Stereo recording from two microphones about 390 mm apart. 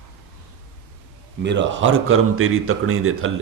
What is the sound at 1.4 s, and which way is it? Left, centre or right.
A man's voice, right.